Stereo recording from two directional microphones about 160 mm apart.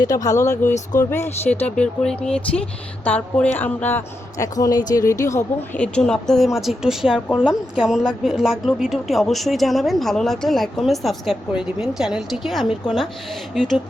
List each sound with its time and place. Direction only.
0.0 s a woman's voice: 20° left (ahead or behind); by 13.8 s centre (ahead or behind)